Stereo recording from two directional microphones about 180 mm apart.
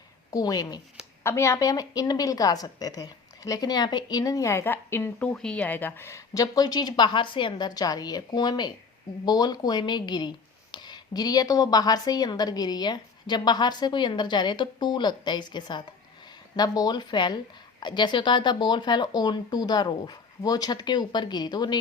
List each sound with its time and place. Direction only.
0.3 s a woman's voice: 20° left (ahead or behind)